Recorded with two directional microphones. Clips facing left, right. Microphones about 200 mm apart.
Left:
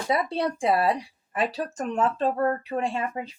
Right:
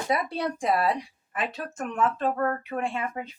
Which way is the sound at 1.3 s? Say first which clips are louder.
Left 5 dB; 35° left (ahead or behind).